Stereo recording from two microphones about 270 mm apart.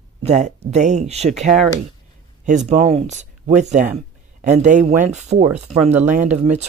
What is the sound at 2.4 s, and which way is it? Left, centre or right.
Speech, right.